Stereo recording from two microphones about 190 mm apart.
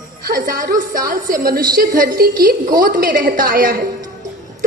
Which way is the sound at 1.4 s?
50° right (ahead or behind).